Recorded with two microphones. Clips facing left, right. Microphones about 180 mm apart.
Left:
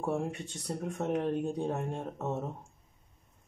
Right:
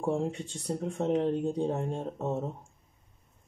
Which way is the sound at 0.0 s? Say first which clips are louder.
Right 3 dB; 25° right (ahead or behind).